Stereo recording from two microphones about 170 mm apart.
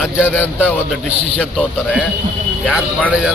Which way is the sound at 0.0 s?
5° right (ahead or behind).